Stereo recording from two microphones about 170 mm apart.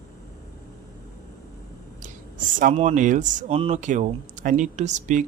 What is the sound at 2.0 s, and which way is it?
Speech, 50° right (ahead or behind).